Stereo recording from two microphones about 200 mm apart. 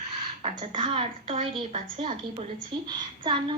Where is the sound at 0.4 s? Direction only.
30° right (ahead or behind).